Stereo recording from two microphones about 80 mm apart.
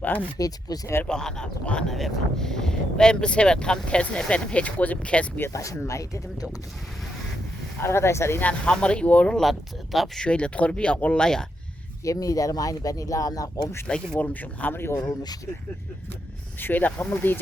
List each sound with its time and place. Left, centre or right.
0.0 s speech: left
0.3 s speech: left
1.0 s speech: centre
5.5 s speech: left
7.8 s speech: left
8.4 s speech: centre
9.4 s speech: centre
10.2 s speech: centre
12.0 s speech: left
13.8 s speech: centre; by 14.9 s left
14.9 s speech: left
16.6 s speech: left